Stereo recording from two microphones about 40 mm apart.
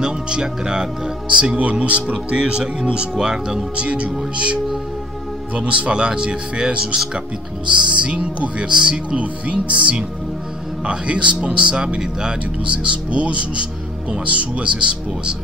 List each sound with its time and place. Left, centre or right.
0.0 s speech: right
1.9 s speech: right
2.3 s speech: right
3.7 s speech: right